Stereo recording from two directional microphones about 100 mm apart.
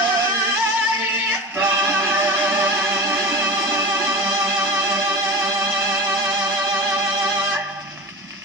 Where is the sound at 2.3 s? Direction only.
20° right (ahead or behind).